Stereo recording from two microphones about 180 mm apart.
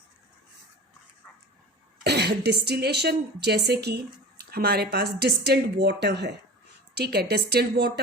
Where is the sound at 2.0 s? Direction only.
70° right (ahead or behind).